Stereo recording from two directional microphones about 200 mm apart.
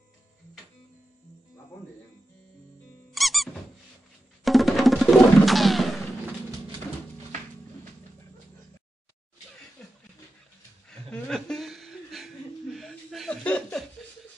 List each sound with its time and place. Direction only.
3.1 s squeak: centre (ahead or behind)
4.5 s music: centre (ahead or behind)
10.9 s chuckle: 5° left (ahead or behind)
12.7 s a sound: centre (ahead or behind)